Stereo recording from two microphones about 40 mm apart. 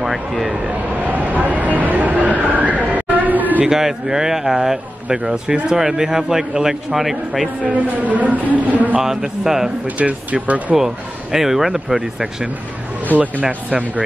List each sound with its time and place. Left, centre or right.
0.0 s speech: centre
0.7 s a sound: right
3.6 s a man's voice: centre
7.6 s a man's voice: right
9.0 s a man's voice: centre
9.8 s a man's voice: right
11.3 s a man's voice: centre
13.5 s a man's voice: right